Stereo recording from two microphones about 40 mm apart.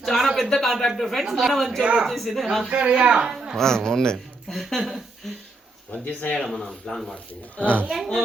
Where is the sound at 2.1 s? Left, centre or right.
Centre.